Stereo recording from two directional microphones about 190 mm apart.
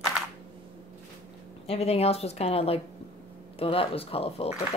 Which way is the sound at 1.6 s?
35° left (ahead or behind).